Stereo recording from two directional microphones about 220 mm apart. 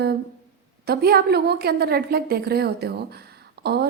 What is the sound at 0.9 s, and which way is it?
A woman's voice, 45° right (ahead or behind).